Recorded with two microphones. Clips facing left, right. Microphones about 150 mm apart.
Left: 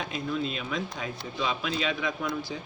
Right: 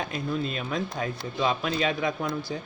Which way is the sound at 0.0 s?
45° right (ahead or behind).